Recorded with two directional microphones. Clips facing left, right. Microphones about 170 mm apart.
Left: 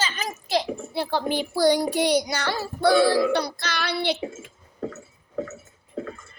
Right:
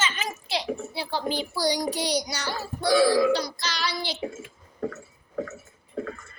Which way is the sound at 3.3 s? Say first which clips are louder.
Left 3 dB; 60° left (ahead or behind).